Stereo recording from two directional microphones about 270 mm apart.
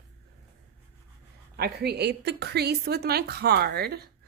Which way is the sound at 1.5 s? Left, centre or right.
Right.